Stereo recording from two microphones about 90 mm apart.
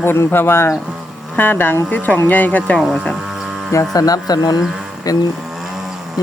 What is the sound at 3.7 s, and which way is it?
Speech, 40° left (ahead or behind).